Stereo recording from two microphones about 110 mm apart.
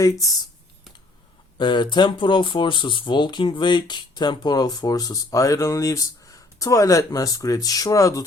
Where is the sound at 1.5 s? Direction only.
45° left (ahead or behind).